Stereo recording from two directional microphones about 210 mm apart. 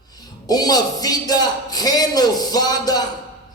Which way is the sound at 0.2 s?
20° left (ahead or behind).